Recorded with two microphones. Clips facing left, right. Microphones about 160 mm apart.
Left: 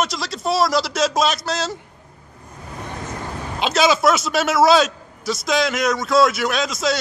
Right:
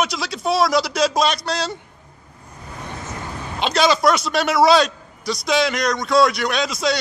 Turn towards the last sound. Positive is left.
turn(degrees=0)  # may be behind; listen again after turning